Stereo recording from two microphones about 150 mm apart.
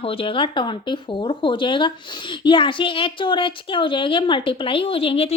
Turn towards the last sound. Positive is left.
turn(degrees=40)  # may be behind; listen again after turning